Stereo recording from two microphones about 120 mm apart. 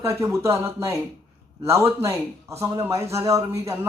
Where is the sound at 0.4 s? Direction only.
25° right (ahead or behind).